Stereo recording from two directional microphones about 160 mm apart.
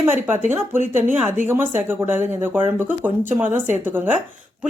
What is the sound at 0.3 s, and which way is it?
Speech, 15° right (ahead or behind).